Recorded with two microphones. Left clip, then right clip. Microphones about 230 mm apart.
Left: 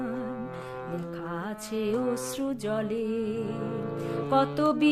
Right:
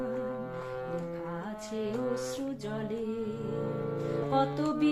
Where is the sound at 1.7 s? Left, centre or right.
Left.